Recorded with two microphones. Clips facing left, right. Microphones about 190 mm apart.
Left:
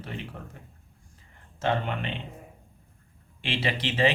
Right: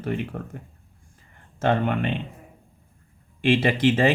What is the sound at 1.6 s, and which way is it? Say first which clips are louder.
Speech: right 6 dB; 55° right (ahead or behind).